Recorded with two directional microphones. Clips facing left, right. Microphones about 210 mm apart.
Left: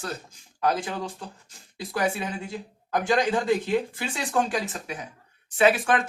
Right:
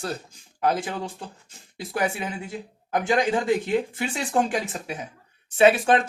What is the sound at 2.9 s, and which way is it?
Speech, 20° right (ahead or behind).